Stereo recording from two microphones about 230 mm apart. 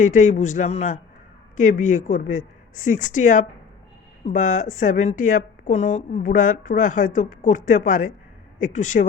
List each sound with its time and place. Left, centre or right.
0.0 s a woman's voice: left